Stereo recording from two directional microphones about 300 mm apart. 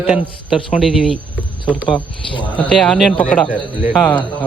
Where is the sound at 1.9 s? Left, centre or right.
Centre.